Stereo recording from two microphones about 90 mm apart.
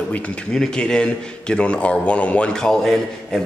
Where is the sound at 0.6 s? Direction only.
5° left (ahead or behind).